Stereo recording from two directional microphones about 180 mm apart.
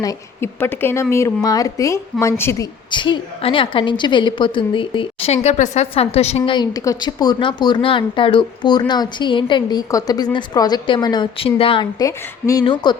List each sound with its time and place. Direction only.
0.0 s a woman's voice: 15° left (ahead or behind)
2.9 s a woman's voice: 25° left (ahead or behind)